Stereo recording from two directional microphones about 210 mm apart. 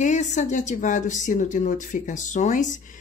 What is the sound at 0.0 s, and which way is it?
Speech, 35° left (ahead or behind).